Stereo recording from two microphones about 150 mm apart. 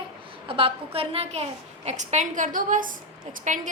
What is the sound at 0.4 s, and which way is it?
A woman's voice, 35° right (ahead or behind).